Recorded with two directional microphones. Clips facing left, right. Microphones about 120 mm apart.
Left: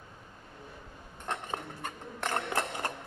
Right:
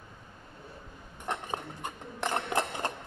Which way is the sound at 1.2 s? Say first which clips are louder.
Right 1 dB; 15° right (ahead or behind).